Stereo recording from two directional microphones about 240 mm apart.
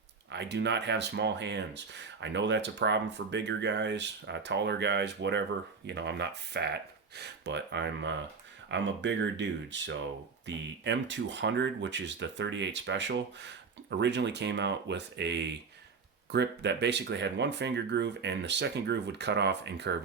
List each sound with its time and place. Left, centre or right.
0.3 s speech: right